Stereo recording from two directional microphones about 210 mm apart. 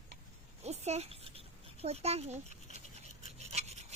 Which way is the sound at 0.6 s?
30° right (ahead or behind).